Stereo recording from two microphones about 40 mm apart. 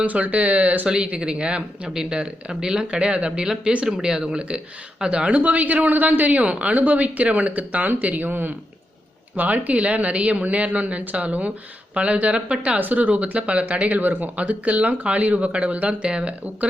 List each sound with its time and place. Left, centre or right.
0.0 s speech: right
0.9 s speech: right
1.9 s speech: centre
5.4 s speech: right
9.3 s speech: right
12.8 s speech: right